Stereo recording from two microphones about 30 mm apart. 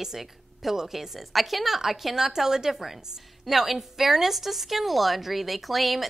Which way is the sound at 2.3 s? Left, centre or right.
Centre.